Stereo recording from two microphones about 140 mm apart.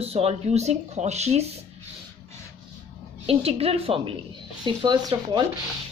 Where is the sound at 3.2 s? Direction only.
45° right (ahead or behind).